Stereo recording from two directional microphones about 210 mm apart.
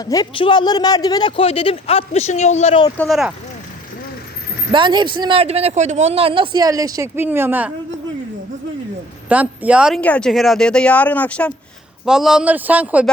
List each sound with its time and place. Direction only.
0.0 s a man's voice: 15° left (ahead or behind)
3.0 s speech: centre (ahead or behind)
4.7 s speech: 20° right (ahead or behind)
9.3 s a man's voice: 5° right (ahead or behind)